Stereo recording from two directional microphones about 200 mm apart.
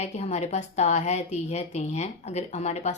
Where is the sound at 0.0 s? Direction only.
35° left (ahead or behind).